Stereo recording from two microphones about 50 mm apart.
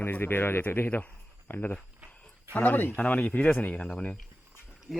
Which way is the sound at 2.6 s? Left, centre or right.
Left.